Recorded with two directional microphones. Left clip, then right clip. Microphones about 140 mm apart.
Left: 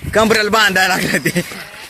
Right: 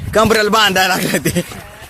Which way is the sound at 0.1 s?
10° right (ahead or behind).